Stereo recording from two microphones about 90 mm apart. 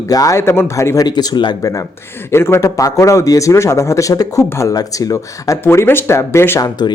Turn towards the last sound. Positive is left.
turn(degrees=30)  # may be behind; listen again after turning